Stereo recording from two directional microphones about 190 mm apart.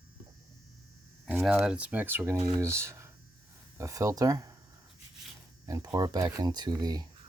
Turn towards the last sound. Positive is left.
turn(degrees=-20)  # may be behind; listen again after turning